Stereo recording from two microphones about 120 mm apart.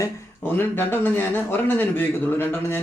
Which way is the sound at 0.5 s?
15° left (ahead or behind).